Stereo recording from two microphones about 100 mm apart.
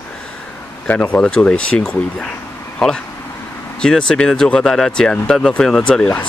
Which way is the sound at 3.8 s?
5° left (ahead or behind).